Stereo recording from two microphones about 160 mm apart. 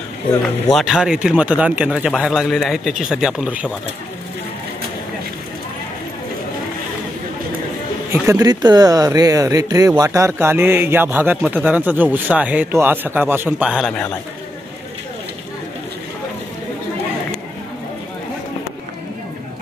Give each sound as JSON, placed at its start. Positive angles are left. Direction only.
{"t": 0.4, "sound": "a man's voice", "side_deg": 0}
{"t": 8.1, "sound": "speech", "side_deg": -20}